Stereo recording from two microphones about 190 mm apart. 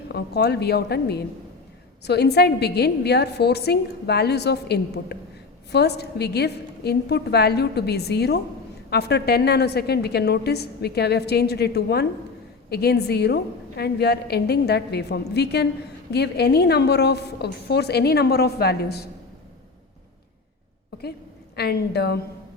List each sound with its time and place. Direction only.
0.1 s a woman's voice: 60° left (ahead or behind)
21.5 s a woman's voice: 60° left (ahead or behind)